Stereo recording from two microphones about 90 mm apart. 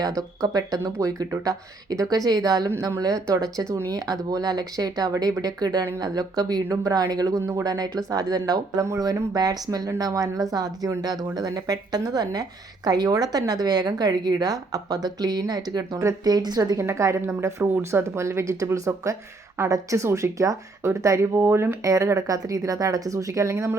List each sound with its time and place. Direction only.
0.0 s a woman's voice: 45° right (ahead or behind)
16.8 s speech: 30° right (ahead or behind)